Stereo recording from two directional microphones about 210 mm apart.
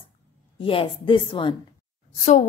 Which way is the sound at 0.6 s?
25° left (ahead or behind).